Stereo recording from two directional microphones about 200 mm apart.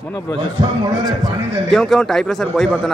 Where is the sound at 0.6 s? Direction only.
20° right (ahead or behind).